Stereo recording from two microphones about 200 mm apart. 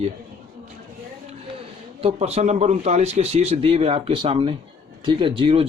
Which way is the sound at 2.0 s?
30° right (ahead or behind).